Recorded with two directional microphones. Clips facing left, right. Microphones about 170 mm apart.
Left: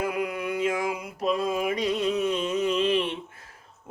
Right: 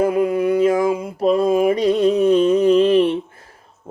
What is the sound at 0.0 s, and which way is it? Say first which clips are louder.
Mantra: right 11 dB; 30° right (ahead or behind).